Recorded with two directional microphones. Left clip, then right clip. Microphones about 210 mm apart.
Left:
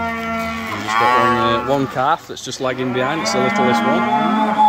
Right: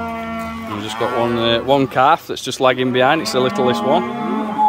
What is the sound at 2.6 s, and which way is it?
Speech, 40° right (ahead or behind).